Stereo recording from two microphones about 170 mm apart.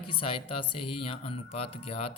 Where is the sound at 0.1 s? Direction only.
30° left (ahead or behind).